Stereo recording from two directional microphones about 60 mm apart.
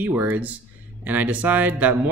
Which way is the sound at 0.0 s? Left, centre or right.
Right.